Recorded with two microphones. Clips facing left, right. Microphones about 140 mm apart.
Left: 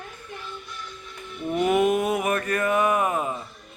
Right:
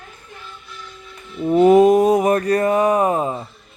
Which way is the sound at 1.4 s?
35° right (ahead or behind).